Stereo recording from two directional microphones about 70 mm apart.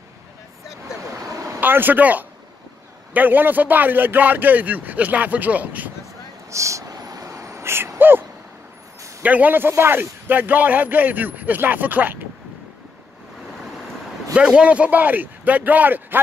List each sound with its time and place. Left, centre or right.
1.2 s vehicle: right
1.6 s a man's voice: right
6.5 s a sound: right
9.2 s a man's voice: right
14.3 s a man's voice: centre